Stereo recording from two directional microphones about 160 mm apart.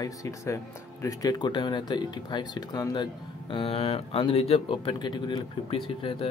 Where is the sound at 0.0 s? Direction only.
20° left (ahead or behind).